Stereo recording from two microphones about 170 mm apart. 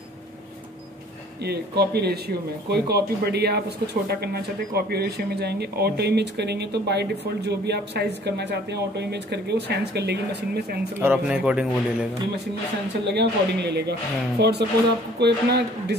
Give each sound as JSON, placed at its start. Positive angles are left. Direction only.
{"t": 1.4, "sound": "speech", "side_deg": -70}
{"t": 11.0, "sound": "a man's voice", "side_deg": -10}
{"t": 13.0, "sound": "speech", "side_deg": -80}